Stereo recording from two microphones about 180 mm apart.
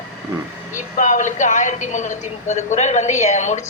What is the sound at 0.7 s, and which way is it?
A woman's voice, 45° left (ahead or behind).